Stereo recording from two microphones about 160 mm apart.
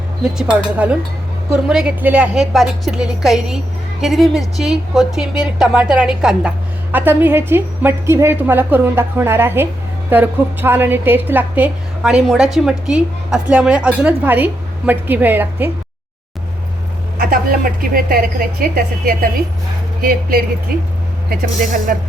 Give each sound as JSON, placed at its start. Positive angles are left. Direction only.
{"t": 0.2, "sound": "a woman's voice", "side_deg": -5}
{"t": 17.2, "sound": "a woman's voice", "side_deg": -65}